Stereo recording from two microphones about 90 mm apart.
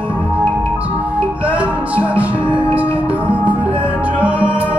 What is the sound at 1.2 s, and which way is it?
Music, 15° right (ahead or behind).